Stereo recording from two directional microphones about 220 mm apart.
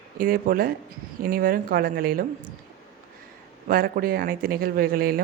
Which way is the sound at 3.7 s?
40° right (ahead or behind).